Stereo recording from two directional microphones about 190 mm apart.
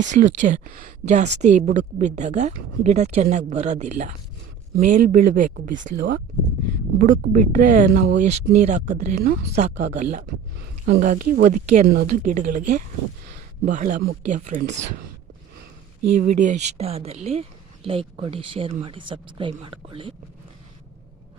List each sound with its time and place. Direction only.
0.0 s speech: 40° right (ahead or behind)
8.2 s speech: 40° right (ahead or behind)
16.2 s speech: 40° right (ahead or behind)